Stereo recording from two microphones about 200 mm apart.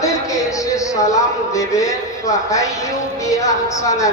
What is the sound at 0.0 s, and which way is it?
Music, 15° left (ahead or behind).